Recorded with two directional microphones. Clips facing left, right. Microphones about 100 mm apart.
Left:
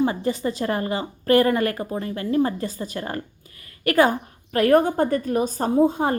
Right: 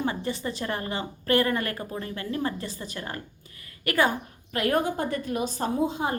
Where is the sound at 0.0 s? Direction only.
35° left (ahead or behind).